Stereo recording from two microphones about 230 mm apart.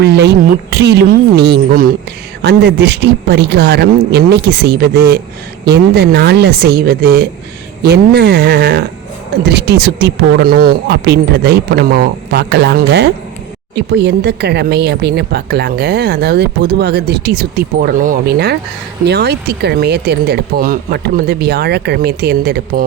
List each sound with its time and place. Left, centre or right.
0.0 s speech: right